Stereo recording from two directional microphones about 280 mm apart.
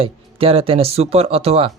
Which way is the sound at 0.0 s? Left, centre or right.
Centre.